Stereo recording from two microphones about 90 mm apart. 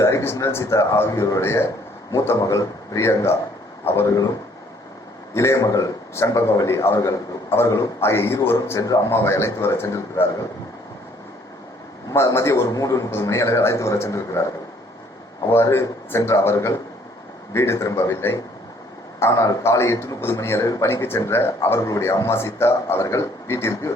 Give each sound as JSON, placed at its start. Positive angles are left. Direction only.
{"t": 0.0, "sound": "speech", "side_deg": 30}
{"t": 5.3, "sound": "a man's voice", "side_deg": 35}
{"t": 12.1, "sound": "speech", "side_deg": 30}
{"t": 15.7, "sound": "a man's voice", "side_deg": 30}
{"t": 18.1, "sound": "a man's voice", "side_deg": 25}
{"t": 20.8, "sound": "a man's voice", "side_deg": 30}